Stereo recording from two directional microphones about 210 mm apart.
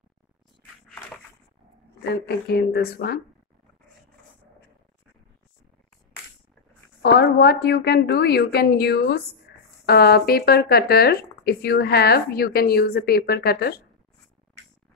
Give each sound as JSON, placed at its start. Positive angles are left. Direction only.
{"t": 2.0, "sound": "speech", "side_deg": 50}
{"t": 7.0, "sound": "speech", "side_deg": 50}